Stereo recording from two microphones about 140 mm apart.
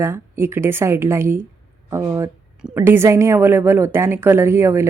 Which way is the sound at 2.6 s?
10° right (ahead or behind).